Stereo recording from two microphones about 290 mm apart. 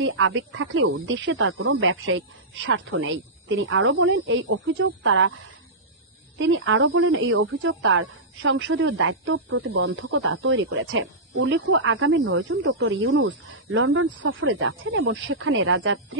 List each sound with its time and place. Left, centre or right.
0.0 s speech: right
6.3 s speech: right